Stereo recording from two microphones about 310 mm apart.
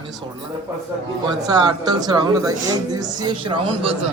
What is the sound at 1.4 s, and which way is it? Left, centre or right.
Speech, centre.